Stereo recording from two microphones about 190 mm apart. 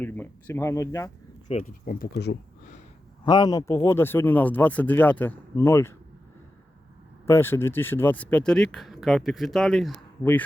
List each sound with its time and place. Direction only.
0.0 s speech: 10° left (ahead or behind)
1.6 s speech: 50° left (ahead or behind)
3.2 s speech: 20° left (ahead or behind)
7.3 s speech: 15° left (ahead or behind)